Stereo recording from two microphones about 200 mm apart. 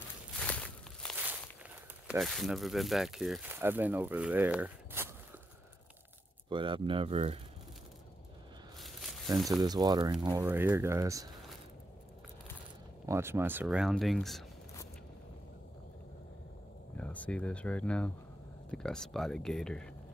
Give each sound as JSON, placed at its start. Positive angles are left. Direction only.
{"t": 0.4, "sound": "walk", "side_deg": 5}
{"t": 2.0, "sound": "speech", "side_deg": 0}
{"t": 6.5, "sound": "speech", "side_deg": -25}
{"t": 8.7, "sound": "a sound", "side_deg": 0}
{"t": 9.6, "sound": "speech", "side_deg": -20}
{"t": 10.4, "sound": "speech", "side_deg": -10}
{"t": 13.0, "sound": "speech", "side_deg": -15}
{"t": 16.9, "sound": "speech", "side_deg": 5}